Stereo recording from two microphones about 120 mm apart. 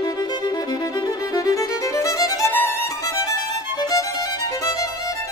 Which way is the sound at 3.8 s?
35° left (ahead or behind).